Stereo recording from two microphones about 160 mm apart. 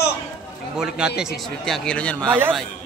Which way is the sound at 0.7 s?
5° right (ahead or behind).